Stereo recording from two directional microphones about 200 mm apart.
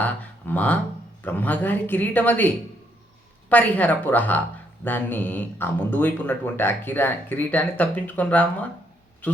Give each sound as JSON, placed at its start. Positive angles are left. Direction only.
{"t": 0.0, "sound": "speech", "side_deg": 10}
{"t": 3.5, "sound": "speech", "side_deg": 5}